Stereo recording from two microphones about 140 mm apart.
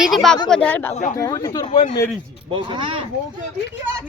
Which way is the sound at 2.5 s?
35° right (ahead or behind).